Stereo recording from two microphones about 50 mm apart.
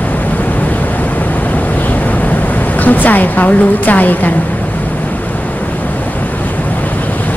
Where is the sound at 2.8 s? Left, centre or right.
Left.